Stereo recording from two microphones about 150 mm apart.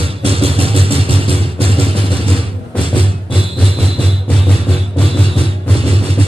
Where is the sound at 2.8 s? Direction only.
35° left (ahead or behind).